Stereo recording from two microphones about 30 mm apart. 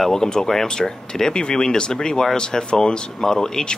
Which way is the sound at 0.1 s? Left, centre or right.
Centre.